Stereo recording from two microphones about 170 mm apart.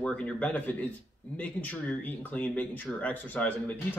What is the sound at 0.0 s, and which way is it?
A man's voice, 5° left (ahead or behind).